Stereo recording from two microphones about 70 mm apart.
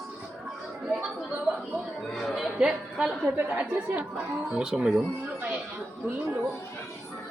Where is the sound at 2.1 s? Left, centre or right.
Centre.